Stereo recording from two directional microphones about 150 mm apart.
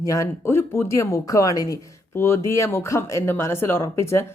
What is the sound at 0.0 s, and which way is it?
A woman's voice, 20° left (ahead or behind).